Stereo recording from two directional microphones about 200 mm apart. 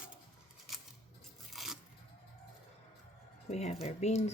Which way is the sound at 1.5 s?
Centre (ahead or behind).